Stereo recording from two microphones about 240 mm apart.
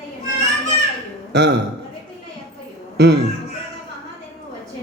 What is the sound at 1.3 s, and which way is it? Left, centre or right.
Speech, right.